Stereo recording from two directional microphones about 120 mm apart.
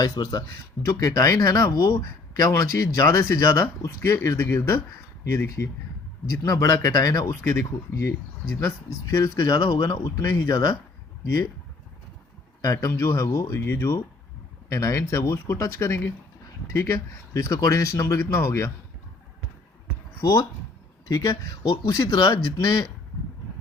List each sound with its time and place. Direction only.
0.0 s speech: 35° left (ahead or behind)
12.6 s speech: 30° left (ahead or behind)
21.1 s speech: 30° left (ahead or behind)